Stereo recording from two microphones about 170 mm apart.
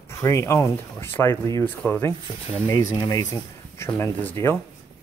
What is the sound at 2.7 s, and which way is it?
Speech, 25° left (ahead or behind).